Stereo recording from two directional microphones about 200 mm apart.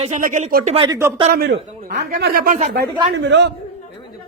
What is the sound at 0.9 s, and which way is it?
Speech, 10° right (ahead or behind).